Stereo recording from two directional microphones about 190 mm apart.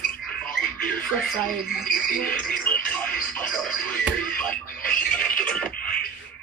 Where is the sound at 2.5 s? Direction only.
5° left (ahead or behind).